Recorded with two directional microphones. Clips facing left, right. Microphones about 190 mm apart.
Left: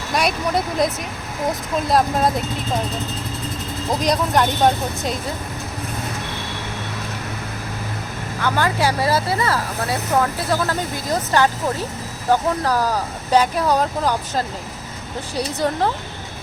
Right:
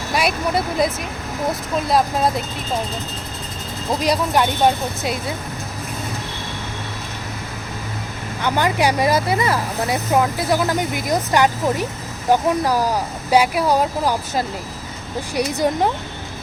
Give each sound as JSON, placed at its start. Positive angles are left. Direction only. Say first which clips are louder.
{"t": 0.1, "sound": "speech", "louder": "even", "side_deg": -5}
{"t": 1.9, "sound": "speech", "louder": "even", "side_deg": 0}
{"t": 4.0, "sound": "speech", "louder": "even", "side_deg": -5}
{"t": 8.4, "sound": "speech", "louder": "right 1 dB", "side_deg": -20}